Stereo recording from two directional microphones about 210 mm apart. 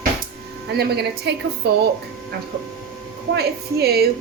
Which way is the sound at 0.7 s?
50° right (ahead or behind).